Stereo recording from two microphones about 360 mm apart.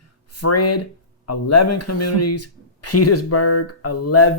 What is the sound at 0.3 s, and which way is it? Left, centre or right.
Speech, left.